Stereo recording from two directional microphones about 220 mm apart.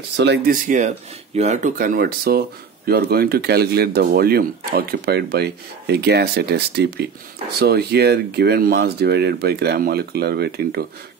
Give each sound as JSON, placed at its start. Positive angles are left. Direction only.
{"t": 0.1, "sound": "speech", "side_deg": -50}
{"t": 0.7, "sound": "speech", "side_deg": -35}